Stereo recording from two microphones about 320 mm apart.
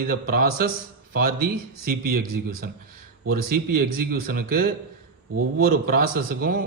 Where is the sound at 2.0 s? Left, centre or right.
Right.